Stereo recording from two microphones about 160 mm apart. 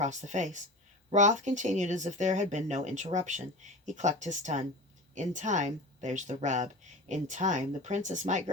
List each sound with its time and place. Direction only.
0.0 s speech: 50° right (ahead or behind)